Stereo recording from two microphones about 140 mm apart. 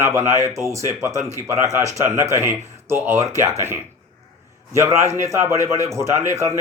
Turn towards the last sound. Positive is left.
turn(degrees=-20)  # may be behind; listen again after turning